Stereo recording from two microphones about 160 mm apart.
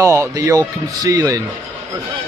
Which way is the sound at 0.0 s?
20° right (ahead or behind).